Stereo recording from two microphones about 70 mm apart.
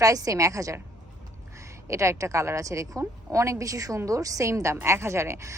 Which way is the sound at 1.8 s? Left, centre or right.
Right.